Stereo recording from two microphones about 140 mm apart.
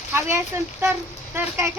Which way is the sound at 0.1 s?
15° right (ahead or behind).